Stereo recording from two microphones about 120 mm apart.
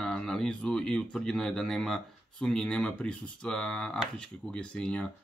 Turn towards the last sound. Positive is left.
turn(degrees=10)  # may be behind; listen again after turning